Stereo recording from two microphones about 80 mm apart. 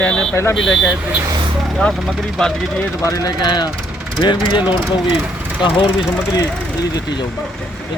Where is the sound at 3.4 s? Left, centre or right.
Left.